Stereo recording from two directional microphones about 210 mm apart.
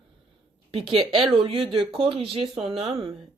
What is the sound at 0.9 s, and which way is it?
Speech, 25° right (ahead or behind).